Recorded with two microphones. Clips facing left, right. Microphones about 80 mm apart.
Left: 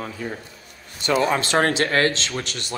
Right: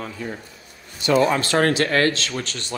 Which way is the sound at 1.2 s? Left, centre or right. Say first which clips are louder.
Right 1 dB; left.